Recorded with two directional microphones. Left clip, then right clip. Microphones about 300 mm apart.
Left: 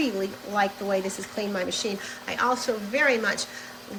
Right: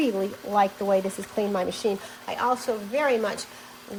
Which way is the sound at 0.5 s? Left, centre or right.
Centre.